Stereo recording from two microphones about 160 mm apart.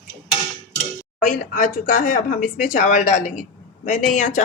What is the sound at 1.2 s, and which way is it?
Speech, 60° left (ahead or behind).